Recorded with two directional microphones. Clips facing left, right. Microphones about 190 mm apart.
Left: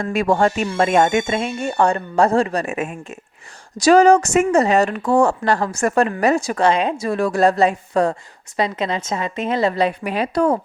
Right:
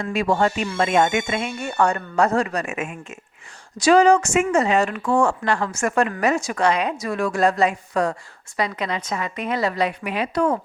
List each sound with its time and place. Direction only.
0.0 s a woman's voice: 50° left (ahead or behind)